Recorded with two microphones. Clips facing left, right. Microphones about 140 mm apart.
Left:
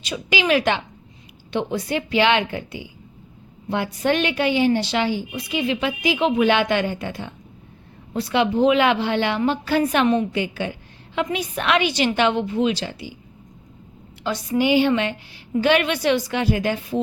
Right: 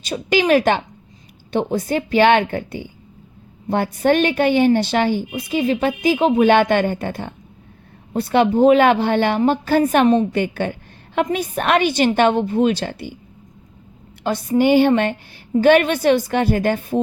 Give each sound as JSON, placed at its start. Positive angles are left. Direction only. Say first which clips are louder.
{"t": 0.0, "sound": "a woman's voice", "louder": "right 5 dB", "side_deg": -45}
{"t": 14.3, "sound": "a woman's voice", "louder": "right 4 dB", "side_deg": -50}